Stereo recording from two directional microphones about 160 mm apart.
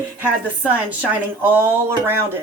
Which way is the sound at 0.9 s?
10° right (ahead or behind).